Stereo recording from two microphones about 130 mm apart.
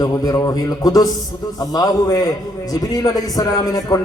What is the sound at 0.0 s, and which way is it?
A man's voice, 30° left (ahead or behind).